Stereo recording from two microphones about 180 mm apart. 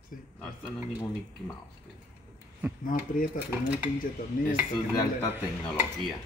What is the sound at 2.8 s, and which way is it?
Speech, 50° left (ahead or behind).